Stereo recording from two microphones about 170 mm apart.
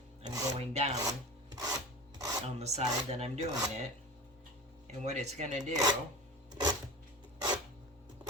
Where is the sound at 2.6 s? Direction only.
40° right (ahead or behind).